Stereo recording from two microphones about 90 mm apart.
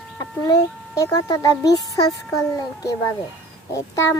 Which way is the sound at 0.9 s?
40° left (ahead or behind).